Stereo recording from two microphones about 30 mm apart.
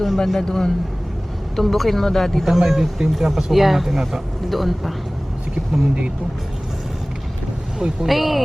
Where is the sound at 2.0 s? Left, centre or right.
Centre.